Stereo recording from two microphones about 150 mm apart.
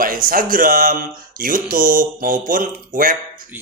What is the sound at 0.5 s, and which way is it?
Speech, 70° right (ahead or behind).